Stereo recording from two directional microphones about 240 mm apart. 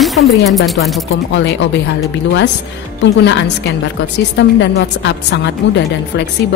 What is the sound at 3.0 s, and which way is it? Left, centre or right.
Speech, left.